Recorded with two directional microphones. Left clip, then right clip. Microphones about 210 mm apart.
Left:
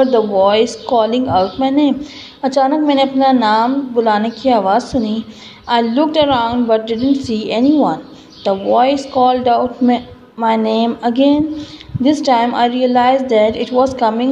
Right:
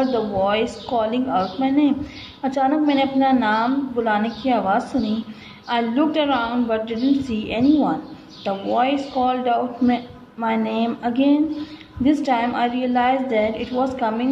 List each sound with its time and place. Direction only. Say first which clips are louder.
0.0 s a woman's voice: left 9 dB; 20° left (ahead or behind)